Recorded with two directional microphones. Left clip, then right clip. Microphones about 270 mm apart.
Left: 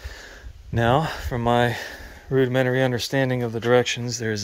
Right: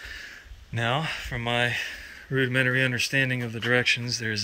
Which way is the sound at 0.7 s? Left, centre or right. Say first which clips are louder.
Left 6 dB; left.